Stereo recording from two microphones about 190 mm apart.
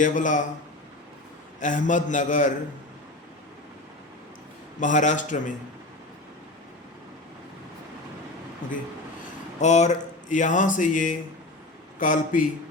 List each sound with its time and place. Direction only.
0.0 s speech: 40° left (ahead or behind)
1.5 s speech: 40° left (ahead or behind)
4.8 s speech: 40° left (ahead or behind)
9.6 s speech: 40° left (ahead or behind)